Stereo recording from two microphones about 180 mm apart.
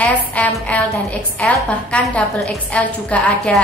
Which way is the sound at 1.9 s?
5° left (ahead or behind).